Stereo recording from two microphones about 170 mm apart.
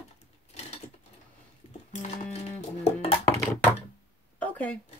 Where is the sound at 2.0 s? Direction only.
40° left (ahead or behind).